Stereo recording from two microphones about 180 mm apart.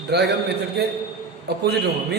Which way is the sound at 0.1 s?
65° right (ahead or behind).